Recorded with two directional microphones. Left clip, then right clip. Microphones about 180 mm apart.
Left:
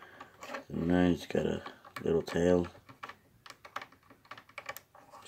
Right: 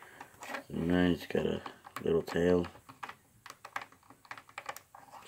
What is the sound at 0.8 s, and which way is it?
Speech, 5° left (ahead or behind).